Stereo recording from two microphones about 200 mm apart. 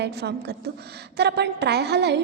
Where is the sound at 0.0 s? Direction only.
55° right (ahead or behind).